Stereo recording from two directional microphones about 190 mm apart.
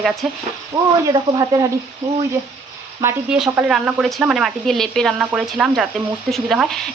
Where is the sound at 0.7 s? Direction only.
20° right (ahead or behind).